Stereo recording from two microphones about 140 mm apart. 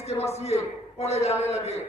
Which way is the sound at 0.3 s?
50° left (ahead or behind).